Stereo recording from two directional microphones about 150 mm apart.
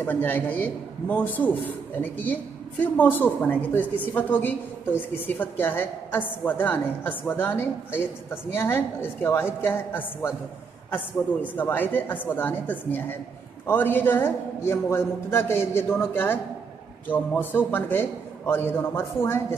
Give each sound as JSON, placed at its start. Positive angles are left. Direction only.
{"t": 0.0, "sound": "a man's voice", "side_deg": 10}
{"t": 11.5, "sound": "a man's voice", "side_deg": 10}